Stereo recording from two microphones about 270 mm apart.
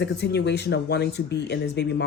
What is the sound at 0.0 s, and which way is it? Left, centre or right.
Speech, left.